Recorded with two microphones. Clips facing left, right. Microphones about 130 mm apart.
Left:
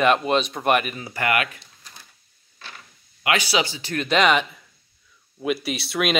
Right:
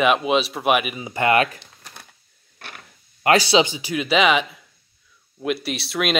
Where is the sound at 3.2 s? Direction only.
35° right (ahead or behind).